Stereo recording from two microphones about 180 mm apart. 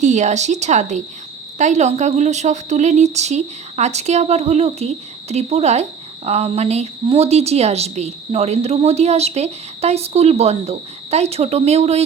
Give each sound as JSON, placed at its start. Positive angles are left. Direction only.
{"t": 0.0, "sound": "a woman's voice", "side_deg": -40}